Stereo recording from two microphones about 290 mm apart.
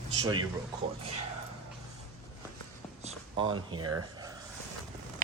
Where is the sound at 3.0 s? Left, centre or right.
Centre.